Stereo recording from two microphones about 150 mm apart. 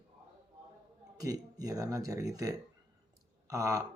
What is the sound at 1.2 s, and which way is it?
Speech, 25° right (ahead or behind).